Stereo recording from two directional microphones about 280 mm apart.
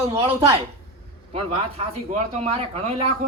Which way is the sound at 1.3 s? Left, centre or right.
Right.